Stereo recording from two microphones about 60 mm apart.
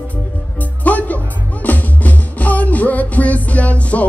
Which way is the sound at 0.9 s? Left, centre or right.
Left.